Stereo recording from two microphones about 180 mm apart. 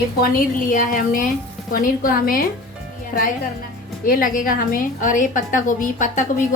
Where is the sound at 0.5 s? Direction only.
50° left (ahead or behind).